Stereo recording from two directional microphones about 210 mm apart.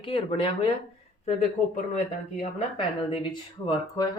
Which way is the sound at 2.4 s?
25° left (ahead or behind).